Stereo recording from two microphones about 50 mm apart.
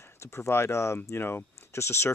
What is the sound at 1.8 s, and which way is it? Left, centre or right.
Speech, left.